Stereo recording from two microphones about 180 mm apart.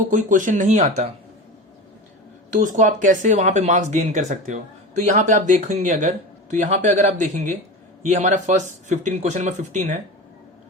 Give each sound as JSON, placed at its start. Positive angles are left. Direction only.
{"t": 0.1, "sound": "speech", "side_deg": -45}
{"t": 2.6, "sound": "speech", "side_deg": -45}